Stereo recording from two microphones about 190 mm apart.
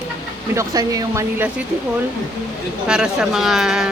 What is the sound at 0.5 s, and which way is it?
Speech, 20° right (ahead or behind).